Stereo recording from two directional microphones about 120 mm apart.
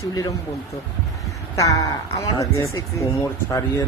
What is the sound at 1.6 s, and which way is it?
Speech, 30° left (ahead or behind).